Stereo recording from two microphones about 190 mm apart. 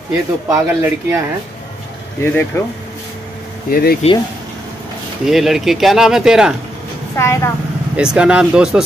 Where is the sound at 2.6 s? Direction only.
15° left (ahead or behind).